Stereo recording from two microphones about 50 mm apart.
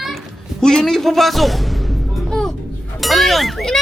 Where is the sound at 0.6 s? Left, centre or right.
Centre.